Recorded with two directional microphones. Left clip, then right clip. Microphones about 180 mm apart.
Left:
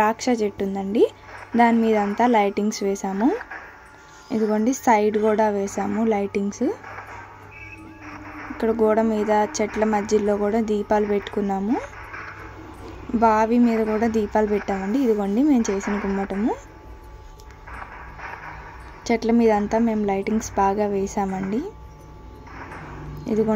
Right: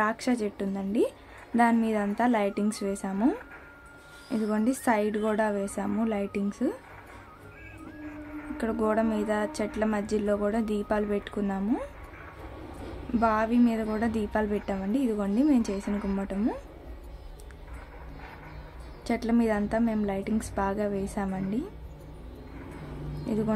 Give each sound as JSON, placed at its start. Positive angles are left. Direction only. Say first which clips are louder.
{"t": 0.0, "sound": "a woman's voice", "louder": "left 7 dB", "side_deg": 15}
{"t": 8.5, "sound": "a woman's voice", "louder": "left 8 dB", "side_deg": 15}
{"t": 13.2, "sound": "a woman's voice", "louder": "left 7 dB", "side_deg": 15}
{"t": 19.0, "sound": "a woman's voice", "louder": "left 8 dB", "side_deg": 15}